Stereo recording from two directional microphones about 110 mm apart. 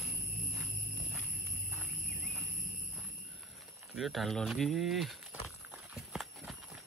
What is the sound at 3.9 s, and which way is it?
Speech, centre (ahead or behind).